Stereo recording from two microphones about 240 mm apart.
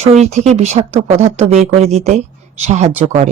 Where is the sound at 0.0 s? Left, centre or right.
Right.